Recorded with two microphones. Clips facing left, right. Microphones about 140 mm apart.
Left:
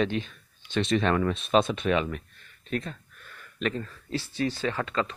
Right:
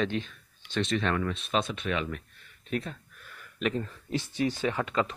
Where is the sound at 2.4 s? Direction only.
5° right (ahead or behind).